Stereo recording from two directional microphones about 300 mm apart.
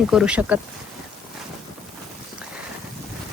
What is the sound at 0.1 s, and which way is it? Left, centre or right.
Speech, centre.